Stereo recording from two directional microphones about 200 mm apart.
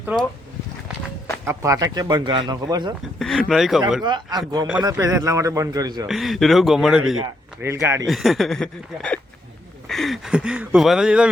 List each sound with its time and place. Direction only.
0.0 s speech: 5° right (ahead or behind)
1.5 s speech: 15° right (ahead or behind)
3.2 s speech: centre (ahead or behind)
4.0 s a man's voice: 20° right (ahead or behind)
6.1 s speech: centre (ahead or behind)
7.6 s a man's voice: 10° right (ahead or behind)
8.0 s speech: centre (ahead or behind)